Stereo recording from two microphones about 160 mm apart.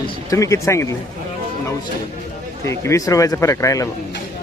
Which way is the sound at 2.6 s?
20° left (ahead or behind).